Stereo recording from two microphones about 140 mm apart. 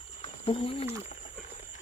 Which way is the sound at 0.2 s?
40° left (ahead or behind).